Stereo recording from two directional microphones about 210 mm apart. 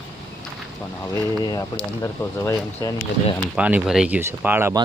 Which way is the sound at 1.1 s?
15° left (ahead or behind).